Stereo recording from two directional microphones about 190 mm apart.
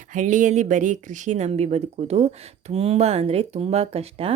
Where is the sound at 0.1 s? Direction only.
40° right (ahead or behind).